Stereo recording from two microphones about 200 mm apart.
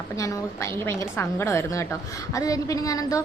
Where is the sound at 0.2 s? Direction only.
15° left (ahead or behind).